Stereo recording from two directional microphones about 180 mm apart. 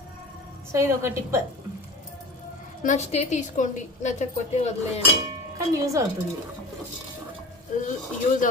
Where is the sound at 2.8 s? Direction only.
40° left (ahead or behind).